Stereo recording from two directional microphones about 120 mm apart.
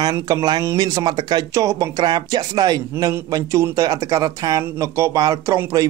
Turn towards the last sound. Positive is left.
turn(degrees=-30)  # may be behind; listen again after turning